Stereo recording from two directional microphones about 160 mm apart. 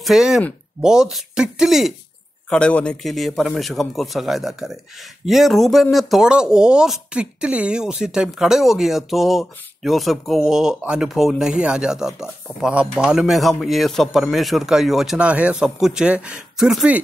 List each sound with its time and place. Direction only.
0.0 s speech: 5° right (ahead or behind)